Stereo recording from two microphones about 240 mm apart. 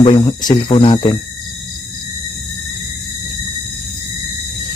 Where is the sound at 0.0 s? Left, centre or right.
Centre.